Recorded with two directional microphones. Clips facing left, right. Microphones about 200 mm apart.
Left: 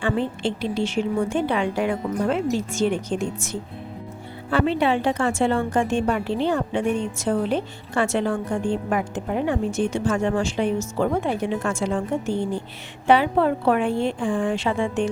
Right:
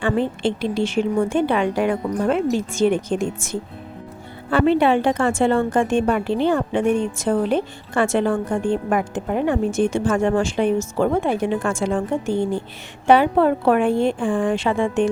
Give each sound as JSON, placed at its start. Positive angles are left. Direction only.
{"t": 0.0, "sound": "a woman's voice", "side_deg": -55}